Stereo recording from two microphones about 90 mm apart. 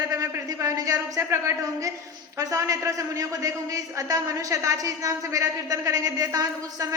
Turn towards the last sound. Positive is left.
turn(degrees=-45)  # may be behind; listen again after turning